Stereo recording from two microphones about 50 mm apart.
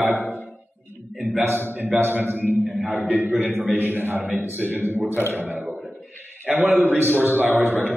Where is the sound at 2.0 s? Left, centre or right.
Right.